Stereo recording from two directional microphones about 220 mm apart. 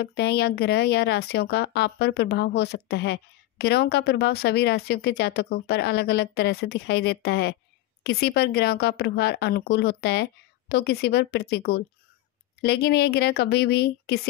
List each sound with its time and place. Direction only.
0.0 s speech: 50° left (ahead or behind)